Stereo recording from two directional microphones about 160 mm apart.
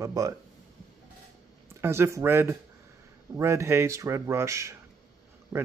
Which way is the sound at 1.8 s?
15° right (ahead or behind).